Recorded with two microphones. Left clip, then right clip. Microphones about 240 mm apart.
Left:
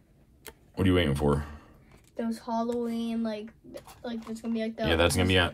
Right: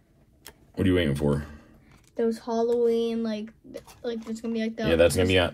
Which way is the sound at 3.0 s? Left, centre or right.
Right.